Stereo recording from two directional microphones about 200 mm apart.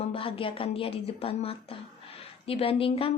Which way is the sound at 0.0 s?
25° left (ahead or behind).